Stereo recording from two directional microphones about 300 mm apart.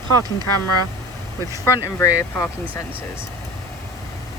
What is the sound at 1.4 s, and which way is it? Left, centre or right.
Speech, centre.